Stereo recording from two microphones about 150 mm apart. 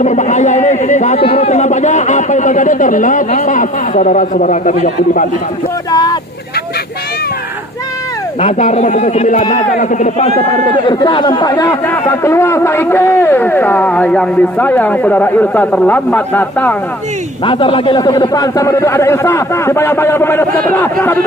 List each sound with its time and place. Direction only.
0.0 s a man's voice: 55° left (ahead or behind)
5.9 s a man's voice: 25° left (ahead or behind)
8.4 s a man's voice: 50° left (ahead or behind)
10.2 s a man's voice: 30° left (ahead or behind); by 16.7 s 10° left (ahead or behind)
17.4 s a man's voice: 35° left (ahead or behind); by 21.2 s 15° left (ahead or behind)